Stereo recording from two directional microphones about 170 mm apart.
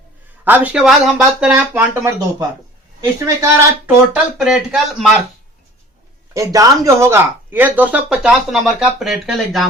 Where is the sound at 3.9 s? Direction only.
5° right (ahead or behind).